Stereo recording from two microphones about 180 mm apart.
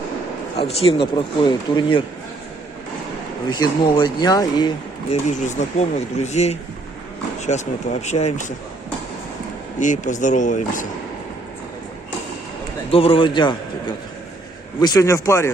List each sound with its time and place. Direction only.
0.6 s speech: 30° left (ahead or behind)
3.5 s speech: 25° left (ahead or behind)
5.1 s speech: 40° left (ahead or behind)
9.8 s speech: 45° left (ahead or behind)
12.9 s speech: 30° left (ahead or behind)
14.8 s speech: 20° left (ahead or behind)